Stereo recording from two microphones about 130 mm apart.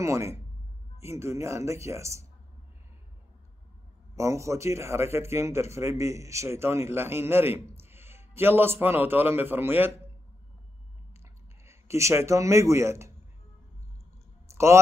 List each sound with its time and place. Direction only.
0.0 s a man's voice: 20° right (ahead or behind)
4.1 s a man's voice: 25° right (ahead or behind)
11.6 s speech: 20° right (ahead or behind)
14.5 s a sound: 20° right (ahead or behind)